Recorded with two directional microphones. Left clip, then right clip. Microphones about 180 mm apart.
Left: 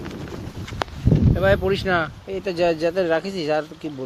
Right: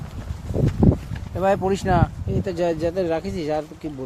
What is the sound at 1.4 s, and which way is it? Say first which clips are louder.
Speech: even; 40° right (ahead or behind).